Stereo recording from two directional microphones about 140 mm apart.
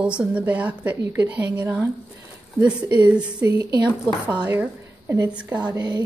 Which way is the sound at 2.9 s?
10° right (ahead or behind).